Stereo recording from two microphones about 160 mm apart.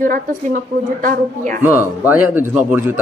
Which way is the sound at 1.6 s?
10° right (ahead or behind).